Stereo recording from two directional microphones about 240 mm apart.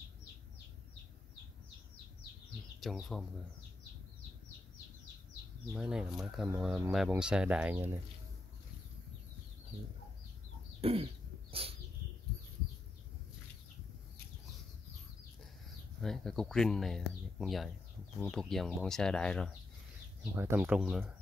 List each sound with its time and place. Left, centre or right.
2.8 s speech: centre
5.7 s speech: centre
10.8 s chicken: right
16.0 s speech: centre
20.3 s speech: centre